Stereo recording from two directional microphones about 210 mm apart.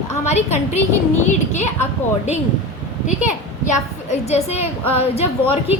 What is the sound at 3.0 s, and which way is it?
A woman's voice, 35° left (ahead or behind).